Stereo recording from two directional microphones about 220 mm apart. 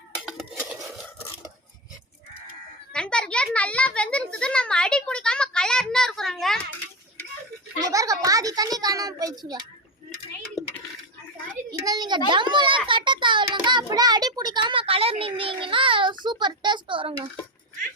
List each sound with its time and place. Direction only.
0.3 s dishes: 5° right (ahead or behind)
2.9 s a sound: 5° left (ahead or behind)
7.9 s a child's voice: 15° right (ahead or behind)
11.7 s a child's voice: 15° right (ahead or behind)